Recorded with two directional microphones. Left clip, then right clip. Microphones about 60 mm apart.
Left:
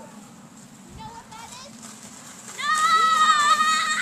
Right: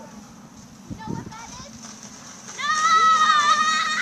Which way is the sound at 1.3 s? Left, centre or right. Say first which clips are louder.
Right 2 dB; centre.